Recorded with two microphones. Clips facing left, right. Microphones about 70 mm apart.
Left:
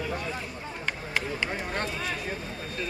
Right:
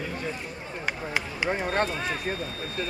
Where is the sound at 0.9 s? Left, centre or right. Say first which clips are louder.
Even; centre.